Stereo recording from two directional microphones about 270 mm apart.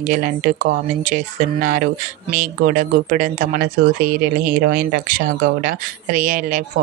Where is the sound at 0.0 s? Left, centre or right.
Right.